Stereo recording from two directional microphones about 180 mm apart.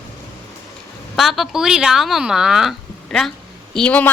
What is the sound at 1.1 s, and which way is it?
A woman's voice, centre (ahead or behind).